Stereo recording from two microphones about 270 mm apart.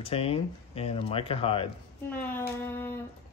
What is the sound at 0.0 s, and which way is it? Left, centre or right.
Speech, left.